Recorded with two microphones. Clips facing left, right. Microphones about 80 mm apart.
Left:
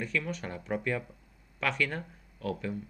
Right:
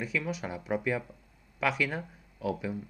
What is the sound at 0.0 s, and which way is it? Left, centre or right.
Speech, centre.